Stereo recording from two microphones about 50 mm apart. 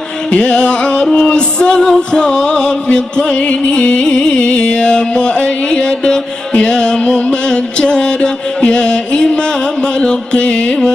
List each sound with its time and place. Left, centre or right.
0.3 s music: left